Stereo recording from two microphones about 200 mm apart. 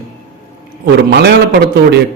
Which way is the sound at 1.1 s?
55° right (ahead or behind).